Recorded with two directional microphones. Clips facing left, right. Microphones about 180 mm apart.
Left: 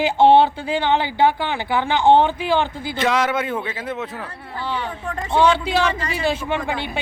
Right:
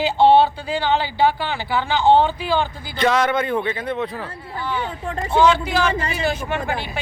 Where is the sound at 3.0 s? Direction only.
5° left (ahead or behind).